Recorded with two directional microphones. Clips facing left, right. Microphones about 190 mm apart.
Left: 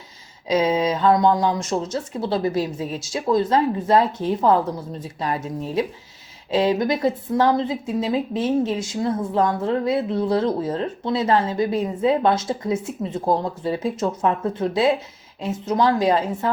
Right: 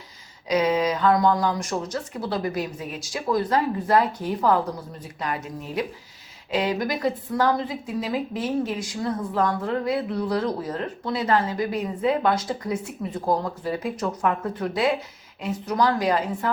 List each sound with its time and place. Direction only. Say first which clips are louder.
0.4 s a woman's voice: left 2 dB; 25° left (ahead or behind)